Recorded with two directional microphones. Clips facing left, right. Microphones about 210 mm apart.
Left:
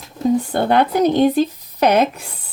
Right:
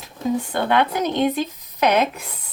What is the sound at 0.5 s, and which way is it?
Speech, 35° left (ahead or behind).